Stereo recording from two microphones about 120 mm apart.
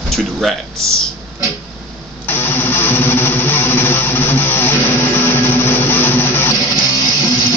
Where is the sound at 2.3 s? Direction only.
20° left (ahead or behind).